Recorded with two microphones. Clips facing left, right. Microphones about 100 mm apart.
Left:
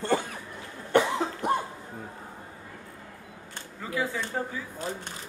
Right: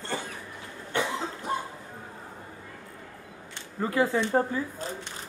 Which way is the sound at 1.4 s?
60° left (ahead or behind).